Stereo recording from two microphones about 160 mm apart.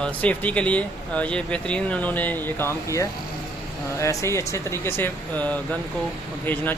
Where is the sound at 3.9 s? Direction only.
20° left (ahead or behind).